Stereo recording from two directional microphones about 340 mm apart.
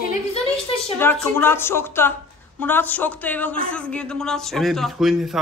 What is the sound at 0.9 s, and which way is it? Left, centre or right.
A woman's voice, centre.